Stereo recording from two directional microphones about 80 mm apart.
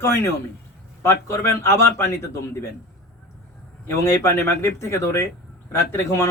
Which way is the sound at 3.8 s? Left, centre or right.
Left.